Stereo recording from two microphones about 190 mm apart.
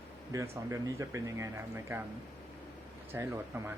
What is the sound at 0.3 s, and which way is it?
Speech, 15° right (ahead or behind).